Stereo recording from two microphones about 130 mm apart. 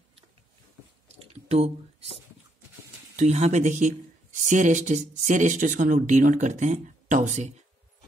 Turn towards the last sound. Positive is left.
turn(degrees=-70)  # may be behind; listen again after turning